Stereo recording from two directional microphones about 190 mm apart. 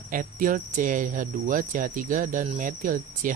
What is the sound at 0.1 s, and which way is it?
Cricket, 45° right (ahead or behind).